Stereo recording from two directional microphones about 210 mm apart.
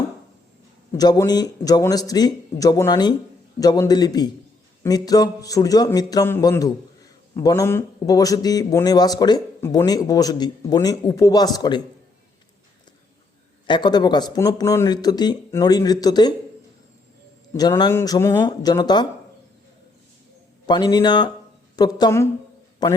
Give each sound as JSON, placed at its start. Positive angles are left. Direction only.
{"t": 0.9, "sound": "speech", "side_deg": 20}
{"t": 13.7, "sound": "speech", "side_deg": 20}
{"t": 17.5, "sound": "speech", "side_deg": 20}
{"t": 20.7, "sound": "speech", "side_deg": 20}